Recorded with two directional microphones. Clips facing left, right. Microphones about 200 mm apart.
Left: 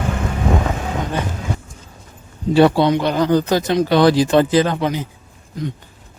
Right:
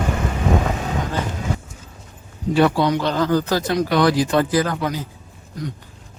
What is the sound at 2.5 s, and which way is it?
Speech, 30° left (ahead or behind).